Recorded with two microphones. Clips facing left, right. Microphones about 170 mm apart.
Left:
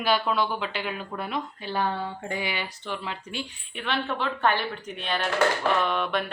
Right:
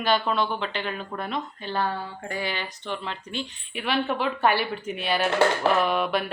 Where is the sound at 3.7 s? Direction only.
10° right (ahead or behind).